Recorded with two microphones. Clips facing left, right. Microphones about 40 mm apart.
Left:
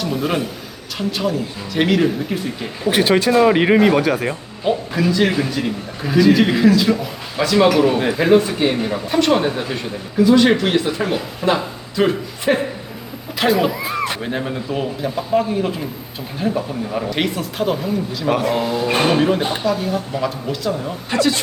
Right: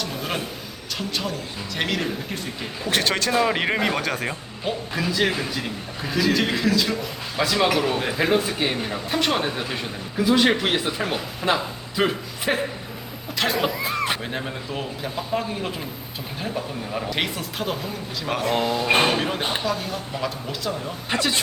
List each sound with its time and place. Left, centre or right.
0.0 s a sound: centre
0.9 s speech: centre
11.4 s speech: centre
12.5 s speech: centre
21.1 s speech: right